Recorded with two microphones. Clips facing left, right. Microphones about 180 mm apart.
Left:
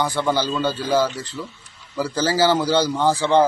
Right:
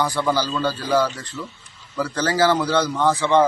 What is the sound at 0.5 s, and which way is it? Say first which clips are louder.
A man's voice: even; 25° left (ahead or behind).